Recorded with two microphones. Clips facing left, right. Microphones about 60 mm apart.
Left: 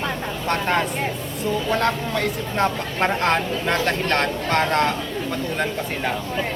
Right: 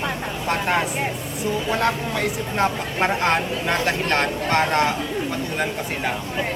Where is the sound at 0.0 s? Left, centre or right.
Centre.